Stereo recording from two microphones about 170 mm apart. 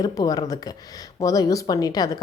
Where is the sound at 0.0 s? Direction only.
20° left (ahead or behind).